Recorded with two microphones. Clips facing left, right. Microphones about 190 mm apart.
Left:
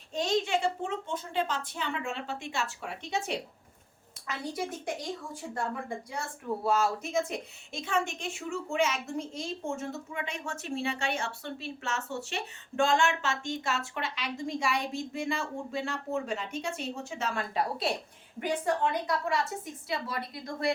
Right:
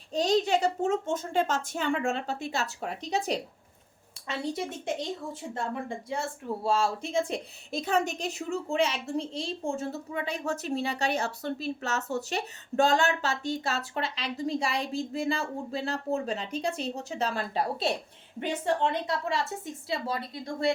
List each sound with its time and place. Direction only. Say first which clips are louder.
0.1 s a woman's voice: right 4 dB; 35° right (ahead or behind)
4.3 s a woman's voice: right 3 dB; 25° right (ahead or behind)
6.7 s a woman's voice: right 1 dB; 30° right (ahead or behind)